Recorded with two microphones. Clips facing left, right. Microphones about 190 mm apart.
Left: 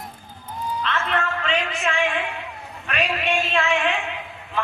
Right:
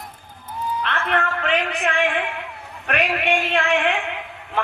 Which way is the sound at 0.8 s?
60° right (ahead or behind).